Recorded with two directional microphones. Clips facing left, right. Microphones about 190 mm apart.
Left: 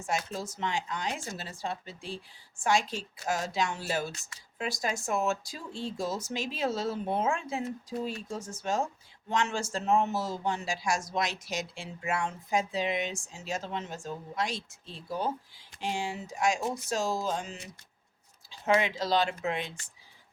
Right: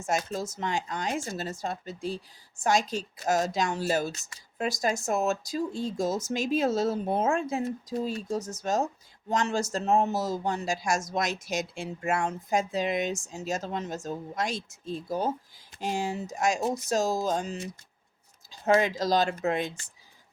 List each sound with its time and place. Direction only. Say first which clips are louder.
0.0 s speech: right 4 dB; 45° right (ahead or behind)
18.6 s speech: right 3 dB; 40° right (ahead or behind)